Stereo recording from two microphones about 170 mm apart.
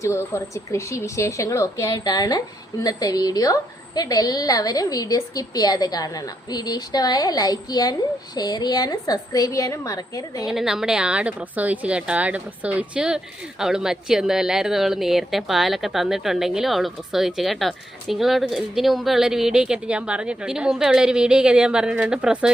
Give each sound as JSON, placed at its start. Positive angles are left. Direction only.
{"t": 0.0, "sound": "a woman's voice", "side_deg": 15}
{"t": 10.4, "sound": "a woman's voice", "side_deg": -5}